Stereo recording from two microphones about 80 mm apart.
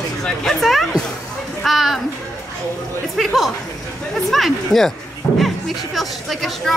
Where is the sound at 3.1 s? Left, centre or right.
Centre.